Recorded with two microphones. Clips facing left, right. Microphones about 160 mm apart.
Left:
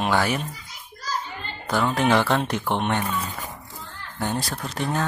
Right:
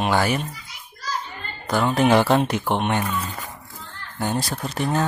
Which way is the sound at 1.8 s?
10° right (ahead or behind).